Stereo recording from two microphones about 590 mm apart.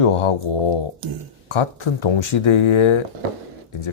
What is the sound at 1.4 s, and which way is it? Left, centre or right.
Speech, left.